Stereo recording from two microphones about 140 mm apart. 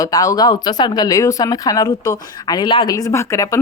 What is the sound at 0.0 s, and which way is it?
Speech, 25° left (ahead or behind).